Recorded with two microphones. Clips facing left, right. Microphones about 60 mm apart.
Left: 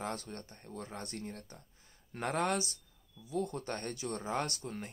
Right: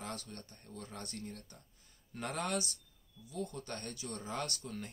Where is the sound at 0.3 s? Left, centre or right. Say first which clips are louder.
Left 4 dB; left.